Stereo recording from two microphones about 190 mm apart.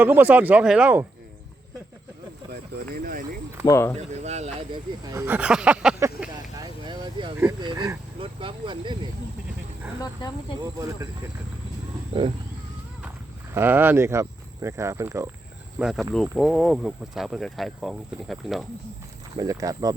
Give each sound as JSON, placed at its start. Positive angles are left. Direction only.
{"t": 0.0, "sound": "speech", "side_deg": -10}
{"t": 2.5, "sound": "speech", "side_deg": -55}
{"t": 3.7, "sound": "speech", "side_deg": 15}
{"t": 3.9, "sound": "speech", "side_deg": -35}
{"t": 4.7, "sound": "speech", "side_deg": -20}
{"t": 6.6, "sound": "a sound", "side_deg": -25}
{"t": 7.6, "sound": "speech", "side_deg": -25}
{"t": 10.0, "sound": "speech", "side_deg": 20}
{"t": 10.8, "sound": "speech", "side_deg": -15}
{"t": 13.5, "sound": "speech", "side_deg": -10}
{"t": 15.8, "sound": "speech", "side_deg": 0}
{"t": 19.4, "sound": "speech", "side_deg": -20}